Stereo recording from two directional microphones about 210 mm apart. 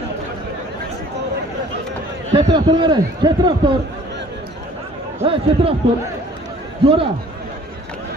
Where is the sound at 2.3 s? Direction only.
20° right (ahead or behind).